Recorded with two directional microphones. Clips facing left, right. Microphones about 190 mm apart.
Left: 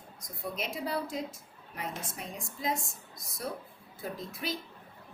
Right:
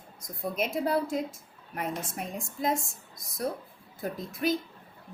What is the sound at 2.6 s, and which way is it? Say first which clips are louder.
Speech: right 5 dB; 50° right (ahead or behind).